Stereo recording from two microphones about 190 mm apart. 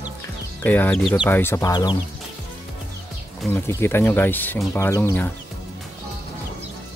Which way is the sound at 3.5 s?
10° left (ahead or behind).